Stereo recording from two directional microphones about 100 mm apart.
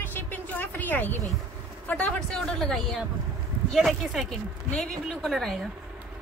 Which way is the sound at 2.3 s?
Centre (ahead or behind).